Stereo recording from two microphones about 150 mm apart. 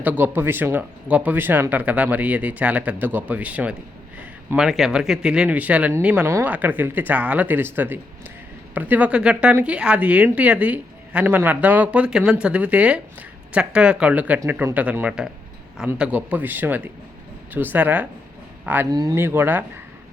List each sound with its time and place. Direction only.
0.0 s speech: 10° right (ahead or behind)
18.9 s speech: 25° right (ahead or behind)